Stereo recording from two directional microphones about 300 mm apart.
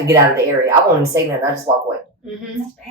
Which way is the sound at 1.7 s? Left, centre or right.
Centre.